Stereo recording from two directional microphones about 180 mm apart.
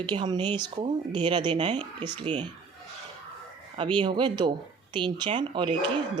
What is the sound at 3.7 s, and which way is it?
A woman's voice, 25° right (ahead or behind).